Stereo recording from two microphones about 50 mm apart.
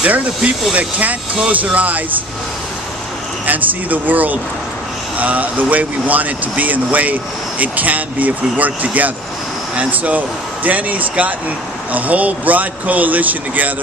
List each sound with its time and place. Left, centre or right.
0.0 s speech: right
3.4 s speech: right